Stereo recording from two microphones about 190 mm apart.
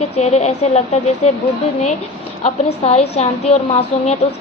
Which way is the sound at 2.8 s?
35° left (ahead or behind).